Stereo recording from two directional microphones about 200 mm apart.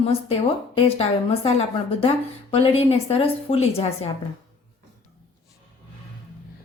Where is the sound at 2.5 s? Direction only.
30° left (ahead or behind).